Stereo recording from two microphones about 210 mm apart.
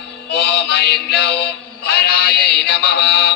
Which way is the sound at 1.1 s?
50° left (ahead or behind).